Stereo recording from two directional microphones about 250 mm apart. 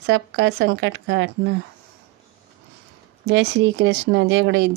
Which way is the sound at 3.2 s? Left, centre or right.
Right.